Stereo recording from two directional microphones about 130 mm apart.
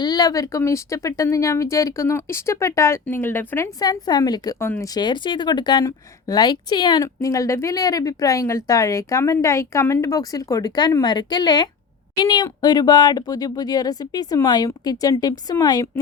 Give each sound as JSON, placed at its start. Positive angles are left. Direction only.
{"t": 0.0, "sound": "a woman's voice", "side_deg": 30}
{"t": 3.8, "sound": "a woman's voice", "side_deg": 30}